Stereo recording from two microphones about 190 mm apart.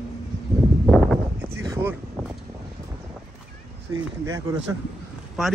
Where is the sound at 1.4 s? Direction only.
15° right (ahead or behind).